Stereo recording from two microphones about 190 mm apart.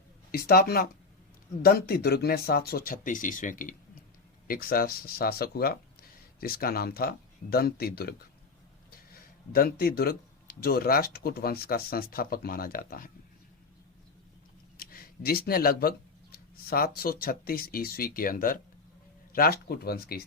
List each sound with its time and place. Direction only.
0.3 s speech: 50° left (ahead or behind)
9.5 s speech: 50° left (ahead or behind)
14.8 s speech: 50° left (ahead or behind)